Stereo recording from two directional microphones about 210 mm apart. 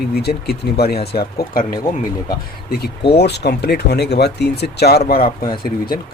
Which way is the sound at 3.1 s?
50° left (ahead or behind).